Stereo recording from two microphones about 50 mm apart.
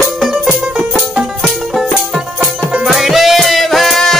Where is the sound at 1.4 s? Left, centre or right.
Centre.